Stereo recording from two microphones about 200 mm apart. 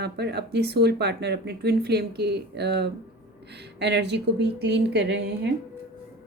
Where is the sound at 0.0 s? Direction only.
55° right (ahead or behind).